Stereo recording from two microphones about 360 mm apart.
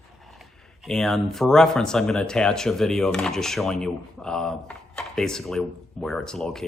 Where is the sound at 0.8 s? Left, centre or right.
Centre.